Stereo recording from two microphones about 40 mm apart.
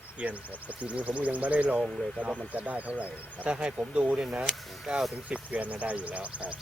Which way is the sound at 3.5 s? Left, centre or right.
Right.